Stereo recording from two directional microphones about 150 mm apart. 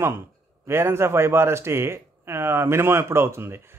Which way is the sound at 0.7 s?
15° right (ahead or behind).